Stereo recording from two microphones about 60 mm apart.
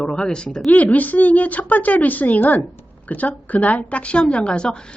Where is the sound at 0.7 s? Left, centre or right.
Left.